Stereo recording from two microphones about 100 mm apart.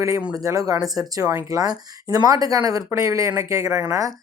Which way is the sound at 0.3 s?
35° right (ahead or behind).